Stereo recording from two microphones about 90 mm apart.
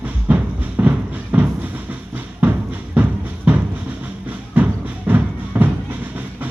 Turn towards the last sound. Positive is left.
turn(degrees=-20)  # may be behind; listen again after turning